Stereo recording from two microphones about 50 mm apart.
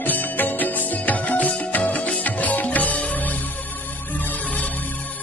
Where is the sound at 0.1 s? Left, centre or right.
Left.